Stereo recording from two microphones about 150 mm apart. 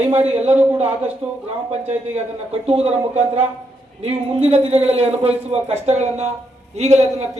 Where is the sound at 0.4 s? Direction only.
45° right (ahead or behind).